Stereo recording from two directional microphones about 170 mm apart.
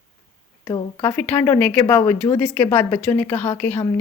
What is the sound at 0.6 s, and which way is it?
Speech, 25° left (ahead or behind).